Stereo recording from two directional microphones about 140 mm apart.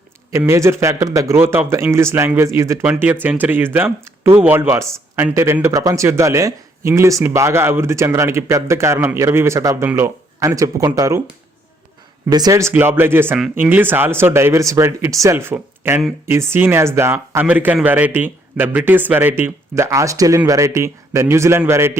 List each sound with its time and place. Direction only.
0.3 s speech: 20° right (ahead or behind)
12.3 s a man's voice: 25° right (ahead or behind)